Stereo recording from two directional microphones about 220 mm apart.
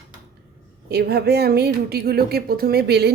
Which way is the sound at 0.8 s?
45° right (ahead or behind).